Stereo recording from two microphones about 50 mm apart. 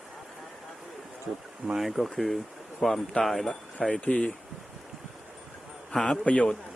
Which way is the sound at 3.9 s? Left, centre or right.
Left.